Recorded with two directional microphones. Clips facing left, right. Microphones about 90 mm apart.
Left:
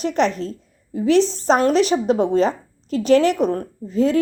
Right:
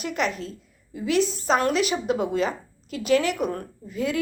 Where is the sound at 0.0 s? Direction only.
35° left (ahead or behind).